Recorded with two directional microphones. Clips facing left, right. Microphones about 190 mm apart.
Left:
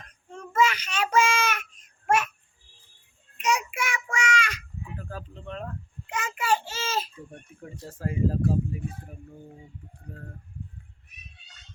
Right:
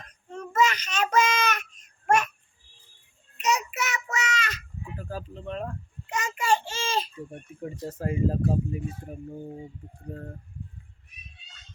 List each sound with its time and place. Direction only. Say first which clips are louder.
0.3 s child singing: even; 10° left (ahead or behind)
3.3 s child singing: even; 10° left (ahead or behind)
4.9 s speech: right 6 dB; 10° right (ahead or behind)
6.1 s a child's voice: right 1 dB; 5° left (ahead or behind)
7.3 s speech: right 9 dB; 20° right (ahead or behind)
9.0 s speech: right 8 dB; 35° right (ahead or behind)
10.1 s speech: right 7 dB; 25° right (ahead or behind)